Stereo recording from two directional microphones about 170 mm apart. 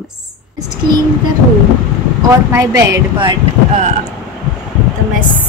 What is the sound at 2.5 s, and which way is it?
Speech, 20° right (ahead or behind).